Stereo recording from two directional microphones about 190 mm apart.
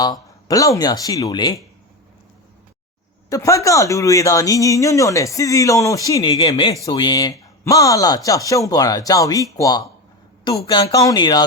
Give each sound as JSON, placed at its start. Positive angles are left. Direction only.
{"t": 0.0, "sound": "speech", "side_deg": 20}
{"t": 3.2, "sound": "speech", "side_deg": 15}